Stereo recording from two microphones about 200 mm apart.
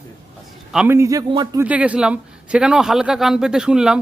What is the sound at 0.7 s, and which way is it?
Speech, 10° right (ahead or behind).